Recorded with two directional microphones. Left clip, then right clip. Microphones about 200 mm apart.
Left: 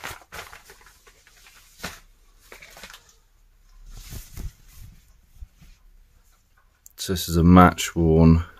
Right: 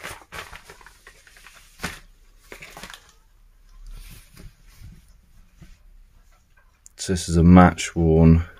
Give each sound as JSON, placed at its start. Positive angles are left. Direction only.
{"t": 6.8, "sound": "speech", "side_deg": 10}